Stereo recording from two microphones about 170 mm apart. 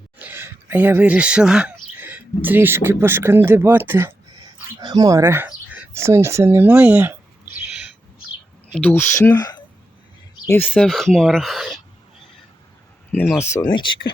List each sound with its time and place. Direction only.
0.2 s speech: 10° right (ahead or behind)
4.8 s speech: 25° right (ahead or behind)
8.7 s speech: 10° left (ahead or behind)
10.7 s speech: centre (ahead or behind)
13.1 s speech: 10° left (ahead or behind)